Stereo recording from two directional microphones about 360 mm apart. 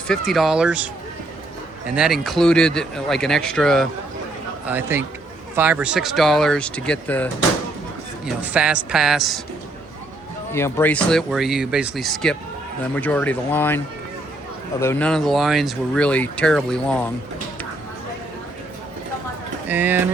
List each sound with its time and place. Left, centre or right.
0.1 s speech: centre
2.0 s speech: centre
8.3 s speech: centre
10.5 s speech: centre
19.6 s speech: centre